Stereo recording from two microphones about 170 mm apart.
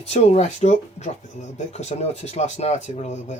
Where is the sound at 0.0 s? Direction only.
40° left (ahead or behind).